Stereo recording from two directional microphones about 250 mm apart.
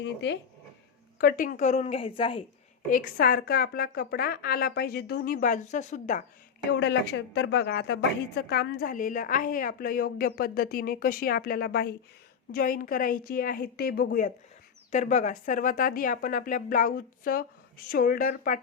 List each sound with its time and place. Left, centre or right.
0.0 s a woman's voice: left
2.9 s a woman's voice: left
6.7 s a woman's voice: left